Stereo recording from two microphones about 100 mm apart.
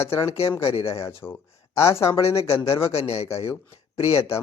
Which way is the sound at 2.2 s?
85° left.